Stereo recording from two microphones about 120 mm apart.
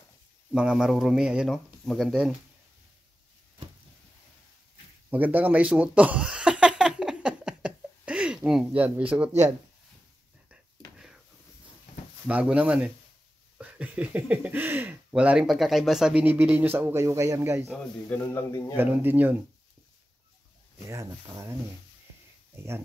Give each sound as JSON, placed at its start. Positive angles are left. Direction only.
{"t": 0.5, "sound": "a man's voice", "side_deg": -5}
{"t": 5.1, "sound": "a sound", "side_deg": -15}
{"t": 8.4, "sound": "speech", "side_deg": -5}
{"t": 10.5, "sound": "a sound", "side_deg": -5}
{"t": 12.3, "sound": "speech", "side_deg": -10}
{"t": 18.1, "sound": "a man's voice", "side_deg": 15}
{"t": 18.8, "sound": "speech", "side_deg": -15}
{"t": 20.9, "sound": "speech", "side_deg": -25}